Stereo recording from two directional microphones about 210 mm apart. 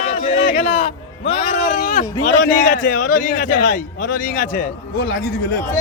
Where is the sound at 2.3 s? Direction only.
35° left (ahead or behind).